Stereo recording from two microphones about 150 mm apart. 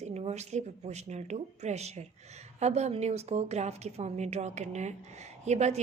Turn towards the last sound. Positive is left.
turn(degrees=-50)  # may be behind; listen again after turning